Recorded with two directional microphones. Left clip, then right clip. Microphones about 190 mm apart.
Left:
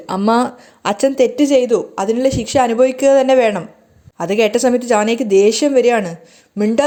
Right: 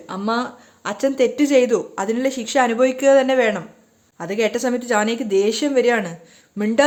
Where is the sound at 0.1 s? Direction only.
25° left (ahead or behind).